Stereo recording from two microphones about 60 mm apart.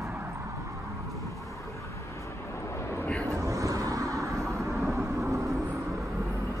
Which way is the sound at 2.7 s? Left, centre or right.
Left.